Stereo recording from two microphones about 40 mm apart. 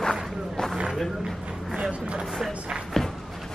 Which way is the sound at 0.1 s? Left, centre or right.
Centre.